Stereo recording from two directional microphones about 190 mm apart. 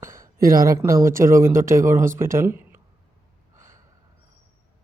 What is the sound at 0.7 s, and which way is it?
Speech, 15° right (ahead or behind).